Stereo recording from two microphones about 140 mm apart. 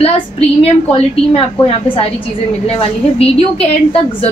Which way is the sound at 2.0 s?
45° left (ahead or behind).